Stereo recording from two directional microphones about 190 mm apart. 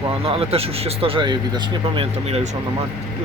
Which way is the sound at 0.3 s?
30° right (ahead or behind).